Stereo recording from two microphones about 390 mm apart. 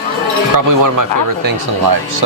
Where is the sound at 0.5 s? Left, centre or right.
Right.